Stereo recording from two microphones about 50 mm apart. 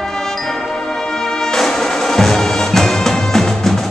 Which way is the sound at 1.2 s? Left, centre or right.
Centre.